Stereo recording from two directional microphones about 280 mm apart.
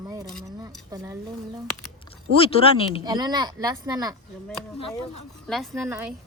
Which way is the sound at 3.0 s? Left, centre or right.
Centre.